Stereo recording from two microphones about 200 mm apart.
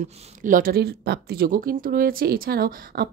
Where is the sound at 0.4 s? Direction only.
45° right (ahead or behind).